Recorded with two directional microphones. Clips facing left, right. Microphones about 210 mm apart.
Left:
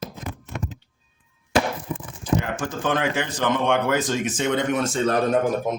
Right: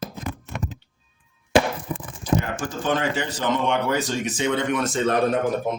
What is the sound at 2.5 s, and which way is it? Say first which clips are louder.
Speech: even; 55° left (ahead or behind).